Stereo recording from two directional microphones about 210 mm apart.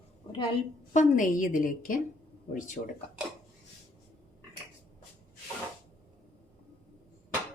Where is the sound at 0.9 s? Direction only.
40° left (ahead or behind).